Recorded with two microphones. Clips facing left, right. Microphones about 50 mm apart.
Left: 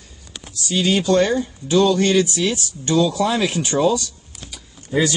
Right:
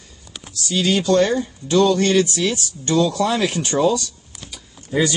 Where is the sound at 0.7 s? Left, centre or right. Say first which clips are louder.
Even; centre.